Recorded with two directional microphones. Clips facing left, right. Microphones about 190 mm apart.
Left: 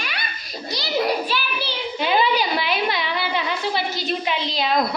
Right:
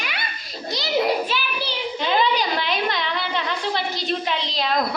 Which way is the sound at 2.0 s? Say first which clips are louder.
Left 1 dB; 10° left (ahead or behind).